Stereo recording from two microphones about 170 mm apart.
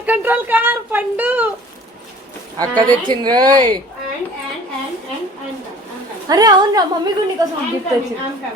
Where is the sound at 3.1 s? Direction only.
25° right (ahead or behind).